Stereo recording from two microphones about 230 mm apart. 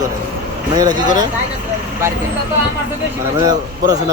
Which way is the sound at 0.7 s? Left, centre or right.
Centre.